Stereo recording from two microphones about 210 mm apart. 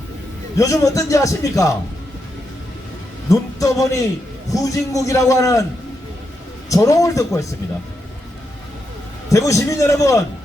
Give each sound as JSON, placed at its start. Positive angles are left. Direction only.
{"t": 0.6, "sound": "a man's voice", "side_deg": 15}
{"t": 3.2, "sound": "a man's voice", "side_deg": 15}
{"t": 6.7, "sound": "a man's voice", "side_deg": 15}
{"t": 9.3, "sound": "a man's voice", "side_deg": 15}